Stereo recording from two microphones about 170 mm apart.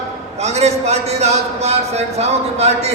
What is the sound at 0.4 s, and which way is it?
A man's voice, 40° right (ahead or behind).